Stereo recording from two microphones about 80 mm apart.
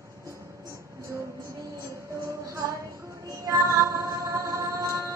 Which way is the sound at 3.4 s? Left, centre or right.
Right.